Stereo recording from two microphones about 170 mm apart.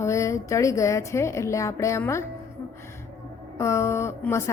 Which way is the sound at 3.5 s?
15° left (ahead or behind).